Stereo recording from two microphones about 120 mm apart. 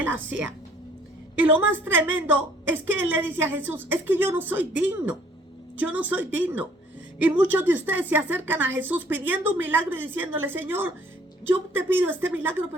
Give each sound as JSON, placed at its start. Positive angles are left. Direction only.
{"t": 0.0, "sound": "a woman's voice", "side_deg": -15}